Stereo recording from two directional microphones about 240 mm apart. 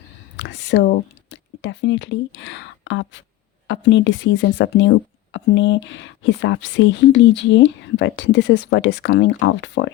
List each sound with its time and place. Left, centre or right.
0.3 s speech: left